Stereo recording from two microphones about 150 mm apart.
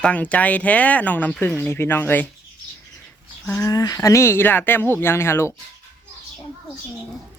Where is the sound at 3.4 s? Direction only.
10° left (ahead or behind).